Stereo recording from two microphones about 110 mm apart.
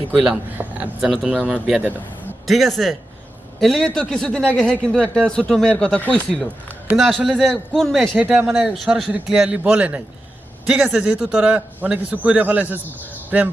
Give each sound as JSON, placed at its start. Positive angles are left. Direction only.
{"t": 0.1, "sound": "a man's voice", "side_deg": -5}
{"t": 1.0, "sound": "a man's voice", "side_deg": -5}
{"t": 6.9, "sound": "a man's voice", "side_deg": 0}
{"t": 8.4, "sound": "a man's voice", "side_deg": -10}